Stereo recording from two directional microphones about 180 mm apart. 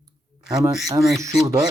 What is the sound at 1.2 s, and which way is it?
Speech, 15° right (ahead or behind).